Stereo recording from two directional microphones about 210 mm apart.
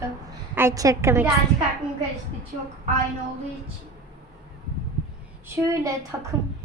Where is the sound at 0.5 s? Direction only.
15° right (ahead or behind).